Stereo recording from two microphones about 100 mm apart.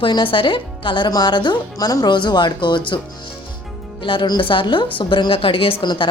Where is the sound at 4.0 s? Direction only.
55° left (ahead or behind).